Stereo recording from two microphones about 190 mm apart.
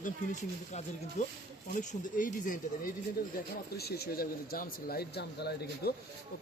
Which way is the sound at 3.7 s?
55° left (ahead or behind).